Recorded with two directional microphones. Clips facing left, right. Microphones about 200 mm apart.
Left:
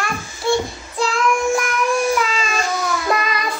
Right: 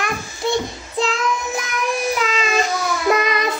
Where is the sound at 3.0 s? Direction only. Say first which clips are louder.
Right 7 dB; 20° right (ahead or behind).